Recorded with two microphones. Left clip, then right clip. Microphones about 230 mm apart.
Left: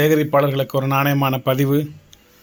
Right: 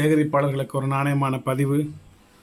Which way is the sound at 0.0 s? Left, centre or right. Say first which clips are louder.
Left 5 dB; centre.